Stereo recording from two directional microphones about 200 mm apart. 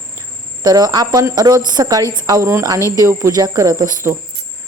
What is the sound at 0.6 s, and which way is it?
Speech, 20° right (ahead or behind).